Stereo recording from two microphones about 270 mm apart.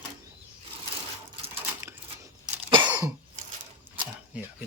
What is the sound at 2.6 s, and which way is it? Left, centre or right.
Cough, centre.